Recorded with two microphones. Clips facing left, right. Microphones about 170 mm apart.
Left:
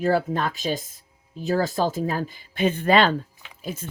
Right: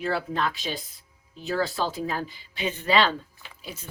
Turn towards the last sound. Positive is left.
turn(degrees=50)  # may be behind; listen again after turning